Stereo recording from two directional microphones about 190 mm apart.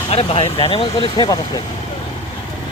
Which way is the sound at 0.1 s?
30° left (ahead or behind).